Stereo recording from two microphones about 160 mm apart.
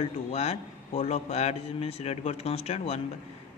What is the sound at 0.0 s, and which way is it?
A man's voice, 40° left (ahead or behind).